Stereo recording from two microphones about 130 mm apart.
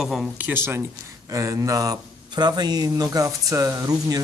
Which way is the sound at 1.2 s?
25° right (ahead or behind).